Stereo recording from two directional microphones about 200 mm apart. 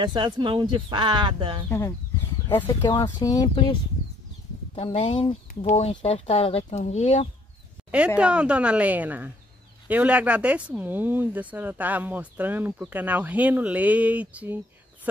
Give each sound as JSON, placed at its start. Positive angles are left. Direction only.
{"t": 0.0, "sound": "speech", "side_deg": -25}
{"t": 1.7, "sound": "speech", "side_deg": 15}
{"t": 4.7, "sound": "speech", "side_deg": 30}
{"t": 8.2, "sound": "speech", "side_deg": -5}